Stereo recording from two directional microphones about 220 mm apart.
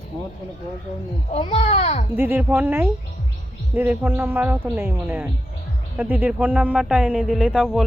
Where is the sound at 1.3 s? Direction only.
25° left (ahead or behind).